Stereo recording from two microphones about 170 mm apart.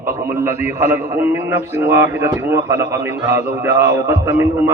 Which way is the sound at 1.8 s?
15° right (ahead or behind).